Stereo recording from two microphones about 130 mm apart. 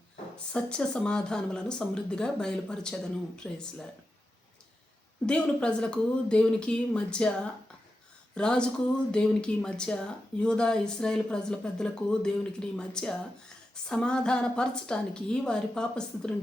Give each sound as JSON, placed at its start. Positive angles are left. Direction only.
{"t": 0.3, "sound": "speech", "side_deg": 10}
{"t": 5.2, "sound": "speech", "side_deg": 5}
{"t": 8.4, "sound": "speech", "side_deg": 5}